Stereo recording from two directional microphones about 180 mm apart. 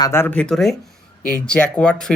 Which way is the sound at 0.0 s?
15° left (ahead or behind).